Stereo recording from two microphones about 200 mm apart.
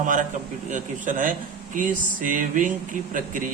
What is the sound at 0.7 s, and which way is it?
Speech, 40° right (ahead or behind).